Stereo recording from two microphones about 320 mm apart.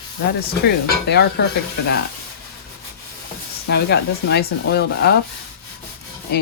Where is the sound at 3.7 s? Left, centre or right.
Left.